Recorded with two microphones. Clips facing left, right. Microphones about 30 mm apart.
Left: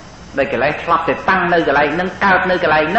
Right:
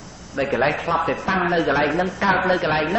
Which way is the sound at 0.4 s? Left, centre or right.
Left.